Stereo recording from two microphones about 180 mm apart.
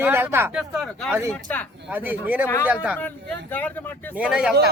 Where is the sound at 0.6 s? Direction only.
Centre (ahead or behind).